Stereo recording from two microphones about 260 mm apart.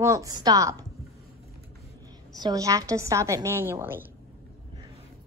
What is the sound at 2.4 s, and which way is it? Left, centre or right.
A woman's voice, centre.